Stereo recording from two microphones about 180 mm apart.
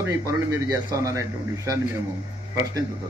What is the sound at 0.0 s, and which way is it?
A man's voice, 15° right (ahead or behind).